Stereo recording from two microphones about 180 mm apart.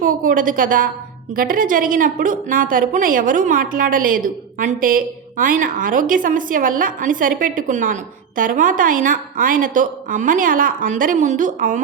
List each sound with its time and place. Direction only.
0.0 s a woman's voice: 50° right (ahead or behind)